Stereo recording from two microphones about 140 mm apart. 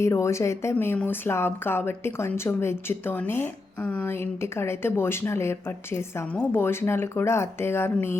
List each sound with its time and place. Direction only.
0.0 s speech: 20° left (ahead or behind)